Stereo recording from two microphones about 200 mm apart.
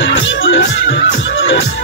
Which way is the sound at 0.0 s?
70° left (ahead or behind).